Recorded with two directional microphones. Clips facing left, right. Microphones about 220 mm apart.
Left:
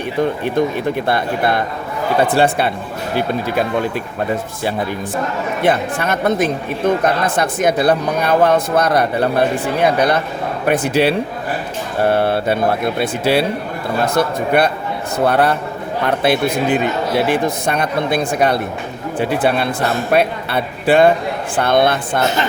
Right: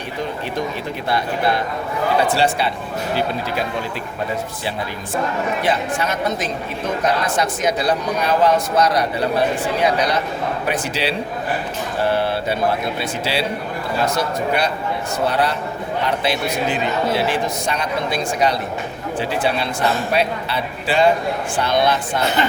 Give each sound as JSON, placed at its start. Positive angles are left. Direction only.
{"t": 0.2, "sound": "a woman's voice", "side_deg": 55}
{"t": 5.6, "sound": "a woman's voice", "side_deg": 55}